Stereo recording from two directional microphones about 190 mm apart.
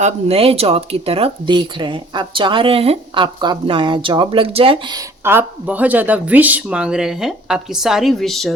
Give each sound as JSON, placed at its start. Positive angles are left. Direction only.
{"t": 0.0, "sound": "speech", "side_deg": -30}
{"t": 5.2, "sound": "speech", "side_deg": -10}